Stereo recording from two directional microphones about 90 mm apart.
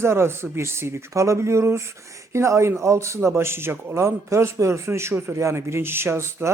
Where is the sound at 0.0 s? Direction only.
30° right (ahead or behind).